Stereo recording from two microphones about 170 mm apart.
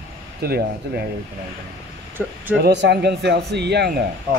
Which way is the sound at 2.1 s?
10° right (ahead or behind).